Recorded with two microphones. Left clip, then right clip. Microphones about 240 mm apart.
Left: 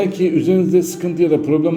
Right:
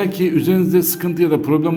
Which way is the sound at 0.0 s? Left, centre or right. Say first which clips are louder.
Left 1 dB; right.